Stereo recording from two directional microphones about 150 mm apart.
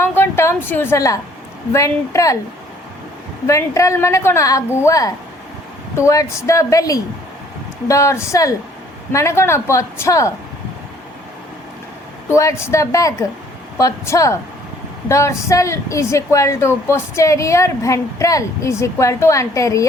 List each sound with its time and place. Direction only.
0.0 s a sound: 15° left (ahead or behind)
1.7 s speech: 20° left (ahead or behind)
3.4 s speech: 20° left (ahead or behind)
12.3 s speech: 20° left (ahead or behind)